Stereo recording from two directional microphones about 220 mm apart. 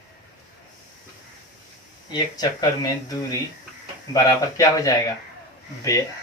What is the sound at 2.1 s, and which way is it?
Speech, 15° left (ahead or behind).